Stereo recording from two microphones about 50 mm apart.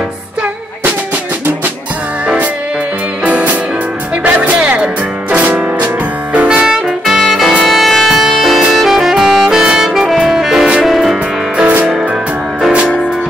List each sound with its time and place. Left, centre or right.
3.3 s music: right
6.7 s music: centre
8.7 s saxophone: centre
10.9 s music: centre